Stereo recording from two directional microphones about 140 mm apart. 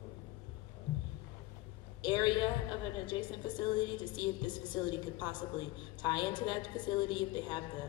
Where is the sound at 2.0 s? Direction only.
30° left (ahead or behind).